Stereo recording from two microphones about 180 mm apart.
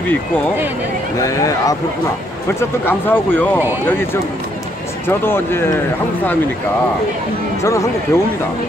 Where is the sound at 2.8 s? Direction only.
10° left (ahead or behind).